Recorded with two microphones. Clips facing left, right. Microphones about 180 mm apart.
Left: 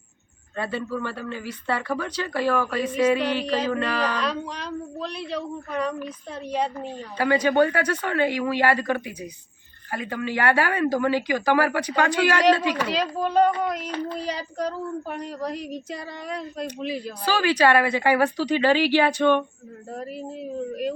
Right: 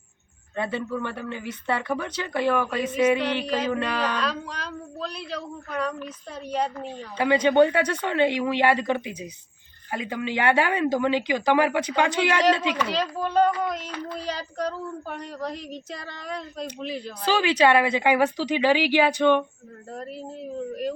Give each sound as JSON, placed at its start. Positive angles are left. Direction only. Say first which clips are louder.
{"t": 0.5, "sound": "speech", "louder": "even", "side_deg": -20}
{"t": 3.4, "sound": "speech", "louder": "left 1 dB", "side_deg": -5}
{"t": 4.1, "sound": "speech", "louder": "left 1 dB", "side_deg": 0}
{"t": 5.8, "sound": "a woman's voice", "louder": "left 1 dB", "side_deg": 10}
{"t": 6.5, "sound": "speech", "louder": "left 1 dB", "side_deg": 0}
{"t": 7.2, "sound": "speech", "louder": "right 1 dB", "side_deg": -20}
{"t": 12.9, "sound": "speech", "louder": "left 2 dB", "side_deg": 5}
{"t": 17.2, "sound": "speech", "louder": "even", "side_deg": -20}
{"t": 19.9, "sound": "speech", "louder": "left 2 dB", "side_deg": 5}